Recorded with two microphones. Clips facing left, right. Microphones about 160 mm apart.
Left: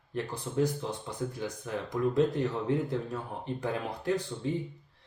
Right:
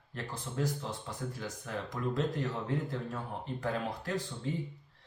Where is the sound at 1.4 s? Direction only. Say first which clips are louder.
Left 4 dB; 20° left (ahead or behind).